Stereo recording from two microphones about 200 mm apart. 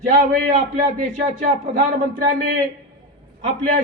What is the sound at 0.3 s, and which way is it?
Speech, 40° right (ahead or behind).